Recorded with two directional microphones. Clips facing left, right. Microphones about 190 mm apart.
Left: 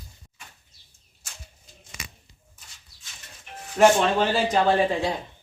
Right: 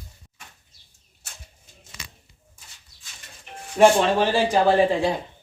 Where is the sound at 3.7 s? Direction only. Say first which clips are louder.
Right 2 dB; 10° right (ahead or behind).